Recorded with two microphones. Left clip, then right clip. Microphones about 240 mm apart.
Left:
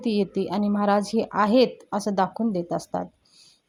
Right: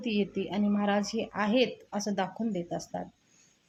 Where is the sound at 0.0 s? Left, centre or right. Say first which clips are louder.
Left 6 dB; left.